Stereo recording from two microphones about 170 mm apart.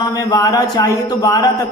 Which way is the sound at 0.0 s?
20° left (ahead or behind).